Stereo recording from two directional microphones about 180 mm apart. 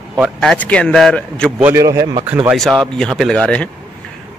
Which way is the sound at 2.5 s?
Centre (ahead or behind).